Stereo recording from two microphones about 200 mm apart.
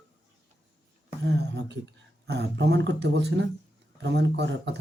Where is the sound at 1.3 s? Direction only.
60° right (ahead or behind).